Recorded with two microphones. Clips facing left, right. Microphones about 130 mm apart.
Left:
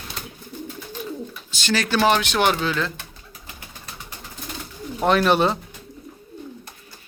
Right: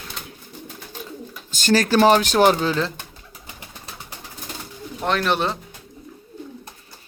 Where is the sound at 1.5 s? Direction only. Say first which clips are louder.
Right 5 dB; 45° right (ahead or behind).